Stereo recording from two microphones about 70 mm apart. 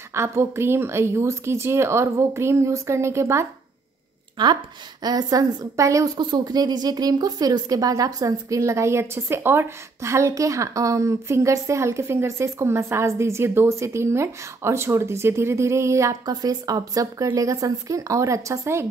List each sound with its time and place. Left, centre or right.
0.1 s speech: right
5.0 s a woman's voice: right
5.8 s a woman's voice: right
6.1 s a woman's voice: right
16.3 s a woman's voice: right